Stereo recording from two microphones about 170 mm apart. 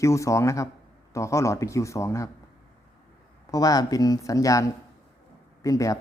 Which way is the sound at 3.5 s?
20° left (ahead or behind).